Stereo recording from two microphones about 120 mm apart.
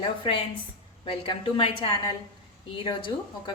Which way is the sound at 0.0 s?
40° left (ahead or behind).